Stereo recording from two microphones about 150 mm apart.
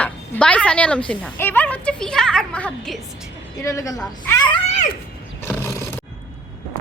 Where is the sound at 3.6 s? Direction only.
20° left (ahead or behind).